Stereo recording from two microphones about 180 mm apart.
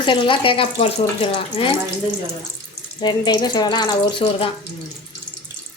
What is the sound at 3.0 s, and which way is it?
A woman's voice, 25° left (ahead or behind).